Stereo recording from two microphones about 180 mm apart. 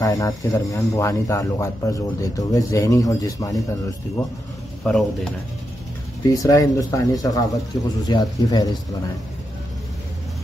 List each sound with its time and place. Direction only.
0.0 s speech: 20° left (ahead or behind)
4.8 s speech: 5° left (ahead or behind)
6.3 s speech: 20° left (ahead or behind)